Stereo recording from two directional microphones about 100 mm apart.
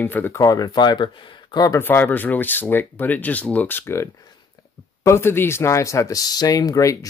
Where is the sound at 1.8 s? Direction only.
20° left (ahead or behind).